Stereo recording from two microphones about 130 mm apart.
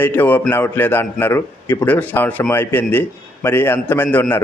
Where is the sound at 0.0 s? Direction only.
15° left (ahead or behind).